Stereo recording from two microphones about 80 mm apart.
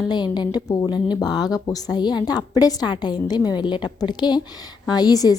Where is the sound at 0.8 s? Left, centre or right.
Left.